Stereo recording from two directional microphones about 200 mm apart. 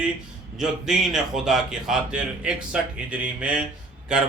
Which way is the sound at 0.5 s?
Centre (ahead or behind).